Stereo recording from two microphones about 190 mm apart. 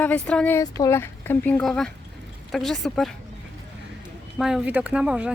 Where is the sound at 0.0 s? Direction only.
5° left (ahead or behind).